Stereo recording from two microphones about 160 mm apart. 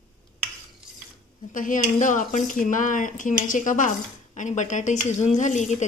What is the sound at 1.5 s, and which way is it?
Speech, 55° left (ahead or behind).